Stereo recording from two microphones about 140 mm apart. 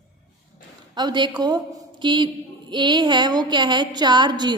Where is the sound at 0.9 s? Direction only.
30° right (ahead or behind).